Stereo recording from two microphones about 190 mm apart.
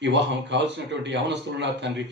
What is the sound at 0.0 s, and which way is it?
A man's voice, 70° right (ahead or behind).